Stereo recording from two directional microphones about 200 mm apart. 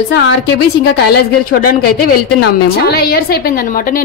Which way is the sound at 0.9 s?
50° left (ahead or behind).